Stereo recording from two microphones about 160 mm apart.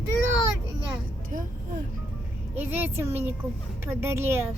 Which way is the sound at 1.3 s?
50° right (ahead or behind).